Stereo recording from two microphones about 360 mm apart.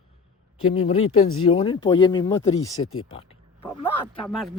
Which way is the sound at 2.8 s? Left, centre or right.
Left.